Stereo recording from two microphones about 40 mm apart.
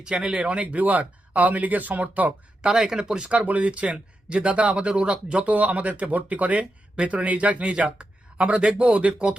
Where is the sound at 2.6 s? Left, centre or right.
Right.